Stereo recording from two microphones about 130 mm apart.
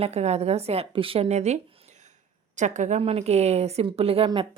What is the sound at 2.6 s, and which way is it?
A woman's voice, 65° right (ahead or behind).